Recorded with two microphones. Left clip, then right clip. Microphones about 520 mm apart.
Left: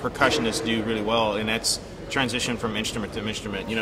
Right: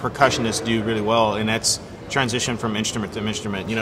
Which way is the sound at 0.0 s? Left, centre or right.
Right.